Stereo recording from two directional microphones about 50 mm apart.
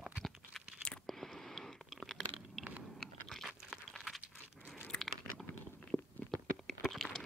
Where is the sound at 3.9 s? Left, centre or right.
Centre.